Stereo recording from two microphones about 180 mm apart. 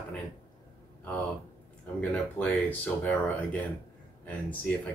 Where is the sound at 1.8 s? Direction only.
10° left (ahead or behind).